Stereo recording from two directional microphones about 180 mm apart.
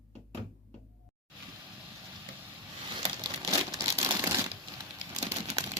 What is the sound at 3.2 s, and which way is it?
Crumpling, 20° right (ahead or behind).